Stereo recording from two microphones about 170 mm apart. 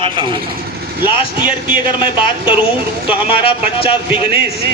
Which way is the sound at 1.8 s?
30° left (ahead or behind).